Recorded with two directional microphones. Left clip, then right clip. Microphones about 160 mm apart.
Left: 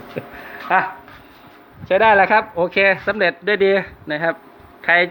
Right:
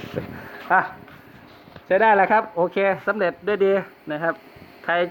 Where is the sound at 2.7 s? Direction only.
25° left (ahead or behind).